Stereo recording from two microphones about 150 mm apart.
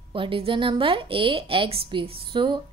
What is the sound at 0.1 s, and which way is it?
A woman's voice, 35° right (ahead or behind).